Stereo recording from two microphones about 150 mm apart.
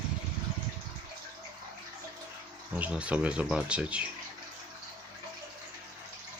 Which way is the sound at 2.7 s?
10° right (ahead or behind).